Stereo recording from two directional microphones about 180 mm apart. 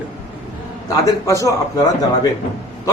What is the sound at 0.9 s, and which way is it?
A man's voice, 20° left (ahead or behind).